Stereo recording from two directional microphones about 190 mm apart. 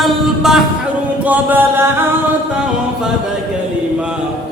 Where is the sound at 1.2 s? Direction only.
10° right (ahead or behind).